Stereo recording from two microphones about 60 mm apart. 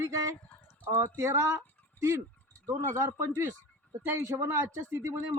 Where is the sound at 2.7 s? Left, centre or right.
Right.